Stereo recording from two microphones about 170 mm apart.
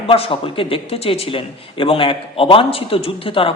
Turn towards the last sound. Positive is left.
turn(degrees=30)  # may be behind; listen again after turning